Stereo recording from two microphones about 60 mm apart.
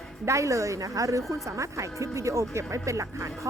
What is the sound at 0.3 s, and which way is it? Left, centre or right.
Speech, right.